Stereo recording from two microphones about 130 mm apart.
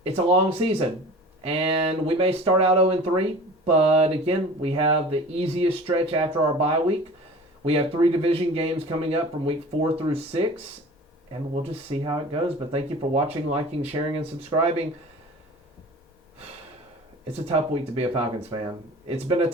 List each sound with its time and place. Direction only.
0.0 s speech: 50° right (ahead or behind)
11.6 s speech: 50° right (ahead or behind)
17.4 s speech: 50° right (ahead or behind)